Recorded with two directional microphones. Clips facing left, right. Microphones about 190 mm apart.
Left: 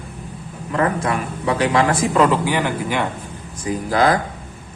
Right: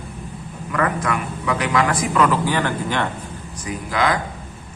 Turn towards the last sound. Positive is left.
turn(degrees=35)  # may be behind; listen again after turning